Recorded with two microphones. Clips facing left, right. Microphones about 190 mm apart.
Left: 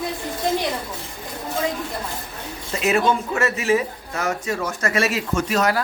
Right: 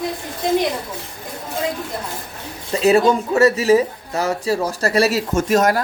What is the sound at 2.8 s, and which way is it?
Speech, 35° right (ahead or behind).